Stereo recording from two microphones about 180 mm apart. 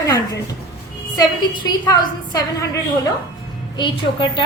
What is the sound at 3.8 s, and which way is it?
Speech, 25° left (ahead or behind).